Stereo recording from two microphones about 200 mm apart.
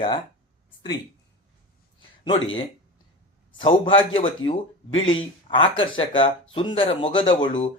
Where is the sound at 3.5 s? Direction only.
25° left (ahead or behind).